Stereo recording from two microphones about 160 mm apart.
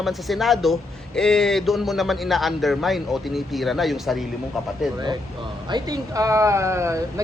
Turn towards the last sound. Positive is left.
turn(degrees=-15)  # may be behind; listen again after turning